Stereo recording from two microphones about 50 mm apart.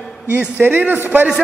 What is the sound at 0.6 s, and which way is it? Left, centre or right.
Speech, right.